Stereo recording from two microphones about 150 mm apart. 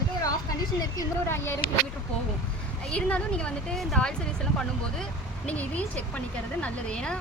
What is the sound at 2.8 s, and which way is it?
Speech, 5° left (ahead or behind).